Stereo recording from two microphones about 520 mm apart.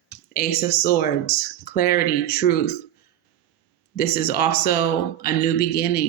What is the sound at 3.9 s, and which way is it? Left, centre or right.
Speech, centre.